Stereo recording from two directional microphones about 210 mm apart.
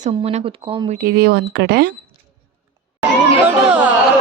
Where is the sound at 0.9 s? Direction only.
45° right (ahead or behind).